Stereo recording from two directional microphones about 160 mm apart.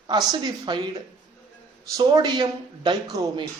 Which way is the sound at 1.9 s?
25° right (ahead or behind).